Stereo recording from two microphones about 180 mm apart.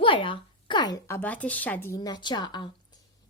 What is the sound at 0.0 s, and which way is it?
Speech, 30° left (ahead or behind).